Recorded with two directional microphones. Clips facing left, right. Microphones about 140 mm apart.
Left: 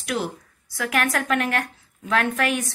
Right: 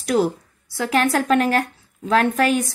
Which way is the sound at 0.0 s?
35° right (ahead or behind).